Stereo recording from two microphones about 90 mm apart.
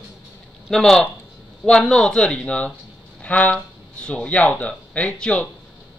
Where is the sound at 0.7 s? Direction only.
5° left (ahead or behind).